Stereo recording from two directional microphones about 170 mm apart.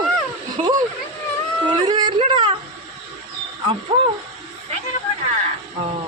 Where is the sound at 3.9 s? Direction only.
30° right (ahead or behind).